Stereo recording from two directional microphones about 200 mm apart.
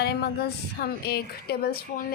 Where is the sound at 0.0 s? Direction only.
55° left (ahead or behind).